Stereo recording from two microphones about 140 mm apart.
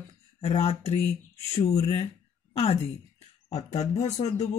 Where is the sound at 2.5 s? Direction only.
45° left (ahead or behind).